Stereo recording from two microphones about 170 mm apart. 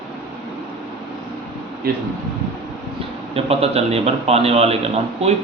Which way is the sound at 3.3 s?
35° right (ahead or behind).